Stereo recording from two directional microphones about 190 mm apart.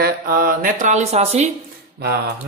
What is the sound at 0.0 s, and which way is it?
Speech, 50° right (ahead or behind).